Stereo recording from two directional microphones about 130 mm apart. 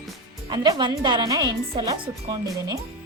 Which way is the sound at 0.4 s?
35° right (ahead or behind).